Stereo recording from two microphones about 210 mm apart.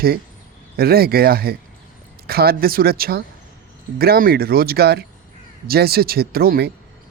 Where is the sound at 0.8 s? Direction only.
45° right (ahead or behind).